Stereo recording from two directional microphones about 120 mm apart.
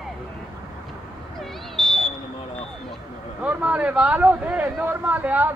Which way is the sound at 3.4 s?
10° right (ahead or behind).